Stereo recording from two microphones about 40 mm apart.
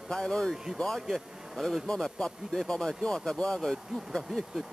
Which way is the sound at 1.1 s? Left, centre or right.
Centre.